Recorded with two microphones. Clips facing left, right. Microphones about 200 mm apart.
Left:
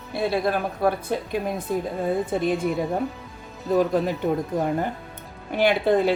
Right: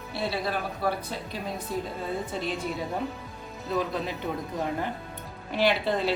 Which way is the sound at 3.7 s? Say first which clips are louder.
Left 8 dB; 45° left (ahead or behind).